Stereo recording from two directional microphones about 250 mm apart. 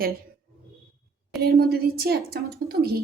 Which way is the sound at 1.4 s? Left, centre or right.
Right.